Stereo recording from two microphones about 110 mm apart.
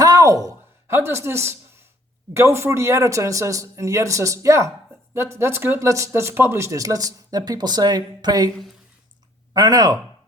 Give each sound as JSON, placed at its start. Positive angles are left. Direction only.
{"t": 0.0, "sound": "a sound", "side_deg": -30}
{"t": 2.3, "sound": "speech", "side_deg": -25}
{"t": 9.5, "sound": "speech", "side_deg": -35}